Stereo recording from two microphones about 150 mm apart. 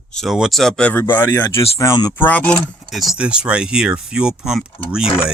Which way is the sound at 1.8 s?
25° left (ahead or behind).